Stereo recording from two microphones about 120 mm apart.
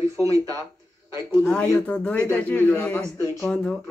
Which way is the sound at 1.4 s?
5° left (ahead or behind).